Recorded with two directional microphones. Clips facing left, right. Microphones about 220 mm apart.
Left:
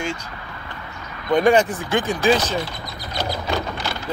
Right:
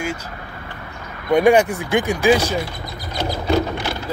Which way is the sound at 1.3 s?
10° right (ahead or behind).